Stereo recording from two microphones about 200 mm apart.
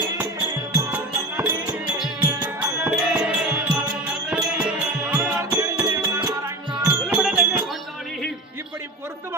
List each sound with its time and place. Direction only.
0.8 s music: 10° right (ahead or behind)
2.4 s music: 5° right (ahead or behind)
6.8 s music: 5° right (ahead or behind)